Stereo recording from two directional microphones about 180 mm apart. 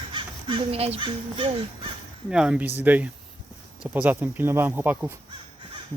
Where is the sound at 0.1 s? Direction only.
30° right (ahead or behind).